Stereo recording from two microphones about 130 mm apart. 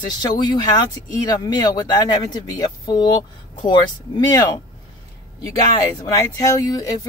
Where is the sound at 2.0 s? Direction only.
30° left (ahead or behind).